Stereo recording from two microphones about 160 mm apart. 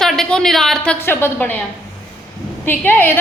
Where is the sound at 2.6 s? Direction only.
15° left (ahead or behind).